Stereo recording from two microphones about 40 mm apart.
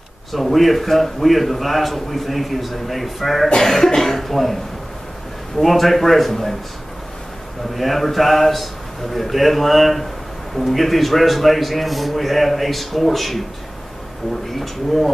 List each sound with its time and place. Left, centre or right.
0.3 s a man's voice: centre
5.6 s a man's voice: centre
7.7 s a man's voice: centre
14.5 s a man's voice: centre